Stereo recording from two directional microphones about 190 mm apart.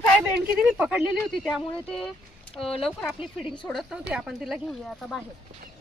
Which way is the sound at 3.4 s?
25° left (ahead or behind).